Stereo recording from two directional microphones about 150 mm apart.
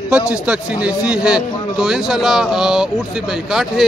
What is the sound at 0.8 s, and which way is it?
A man's voice, 10° right (ahead or behind).